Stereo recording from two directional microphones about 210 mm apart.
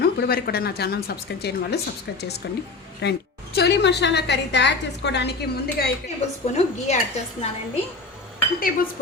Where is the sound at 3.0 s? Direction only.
50° left (ahead or behind).